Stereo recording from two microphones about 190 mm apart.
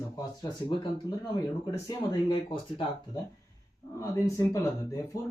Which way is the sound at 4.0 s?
15° left (ahead or behind).